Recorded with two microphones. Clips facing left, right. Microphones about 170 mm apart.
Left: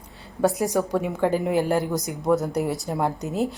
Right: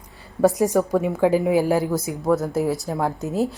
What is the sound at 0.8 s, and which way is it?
A woman's voice, 5° right (ahead or behind).